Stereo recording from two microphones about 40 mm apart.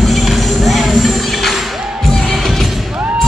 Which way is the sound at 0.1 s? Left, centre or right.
Centre.